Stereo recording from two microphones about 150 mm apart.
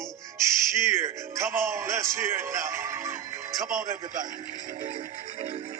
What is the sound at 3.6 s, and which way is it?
Speech, 60° right (ahead or behind).